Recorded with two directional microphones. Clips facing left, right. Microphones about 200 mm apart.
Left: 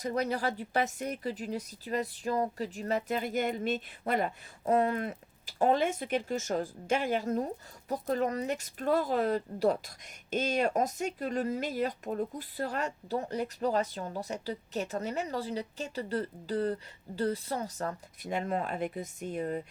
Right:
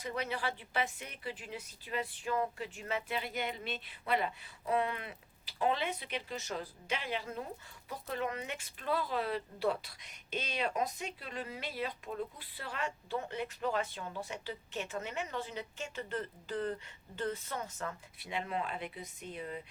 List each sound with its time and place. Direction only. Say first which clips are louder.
0.0 s a woman's voice: left 6 dB; 40° left (ahead or behind)